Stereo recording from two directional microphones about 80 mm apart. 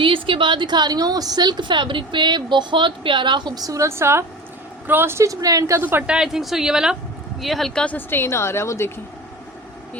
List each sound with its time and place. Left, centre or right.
0.0 s a woman's voice: right
5.8 s speech: right
6.1 s a woman's voice: centre
7.9 s a woman's voice: left